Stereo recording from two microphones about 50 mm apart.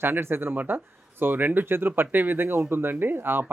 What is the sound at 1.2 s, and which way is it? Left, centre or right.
Speech, right.